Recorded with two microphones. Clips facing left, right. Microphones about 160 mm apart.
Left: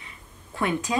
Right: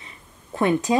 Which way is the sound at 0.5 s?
35° right (ahead or behind).